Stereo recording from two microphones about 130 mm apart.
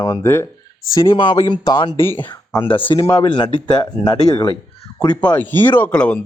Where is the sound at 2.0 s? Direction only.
15° left (ahead or behind).